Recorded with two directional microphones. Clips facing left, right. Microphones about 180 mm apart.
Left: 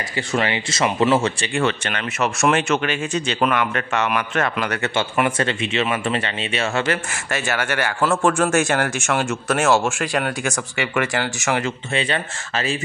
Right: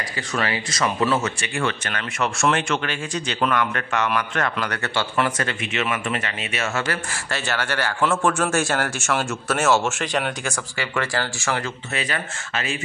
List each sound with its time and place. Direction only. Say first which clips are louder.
0.3 s speech: left 3 dB; 25° left (ahead or behind)
7.2 s speech: left 3 dB; 15° left (ahead or behind); by 12.7 s 30° left (ahead or behind)